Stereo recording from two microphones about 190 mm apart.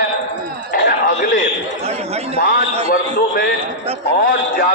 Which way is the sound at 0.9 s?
45° left (ahead or behind).